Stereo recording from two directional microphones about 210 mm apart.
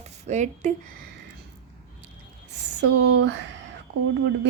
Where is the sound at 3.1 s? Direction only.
55° right (ahead or behind).